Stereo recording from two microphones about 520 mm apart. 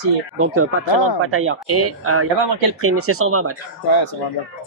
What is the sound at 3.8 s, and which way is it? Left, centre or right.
Speech, left.